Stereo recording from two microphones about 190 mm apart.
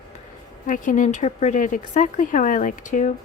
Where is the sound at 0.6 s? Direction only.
45° left (ahead or behind).